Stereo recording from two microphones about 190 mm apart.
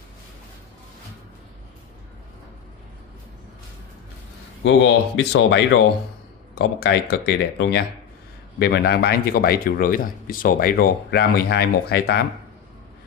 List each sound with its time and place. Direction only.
4.6 s speech: 75° left (ahead or behind)
8.5 s speech: 55° left (ahead or behind)